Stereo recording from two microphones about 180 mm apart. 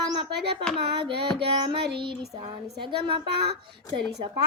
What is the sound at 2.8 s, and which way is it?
Speech, 25° right (ahead or behind).